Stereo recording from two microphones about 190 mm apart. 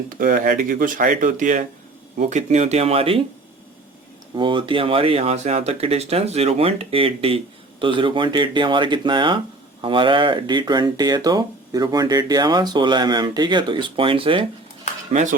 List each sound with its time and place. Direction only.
0.1 s speech: 50° right (ahead or behind); by 3.2 s 30° right (ahead or behind)
4.4 s speech: 25° right (ahead or behind)
15.1 s speech: 40° right (ahead or behind)